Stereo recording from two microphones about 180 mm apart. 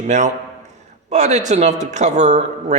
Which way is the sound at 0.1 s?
40° right (ahead or behind).